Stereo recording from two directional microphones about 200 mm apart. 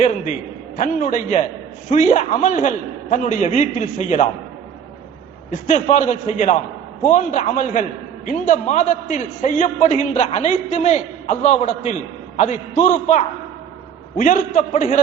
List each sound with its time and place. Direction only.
0.8 s a man's voice: 40° left (ahead or behind)
5.6 s a man's voice: 35° left (ahead or behind)